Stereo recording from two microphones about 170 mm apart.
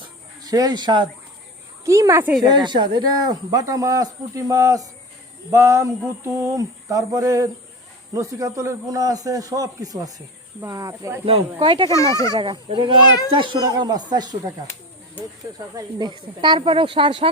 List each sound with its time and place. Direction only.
0.4 s speech: 20° right (ahead or behind)
2.4 s speech: 25° right (ahead or behind)
11.9 s speech: 20° left (ahead or behind)
12.3 s speech: 25° right (ahead or behind)
15.7 s speech: 25° right (ahead or behind)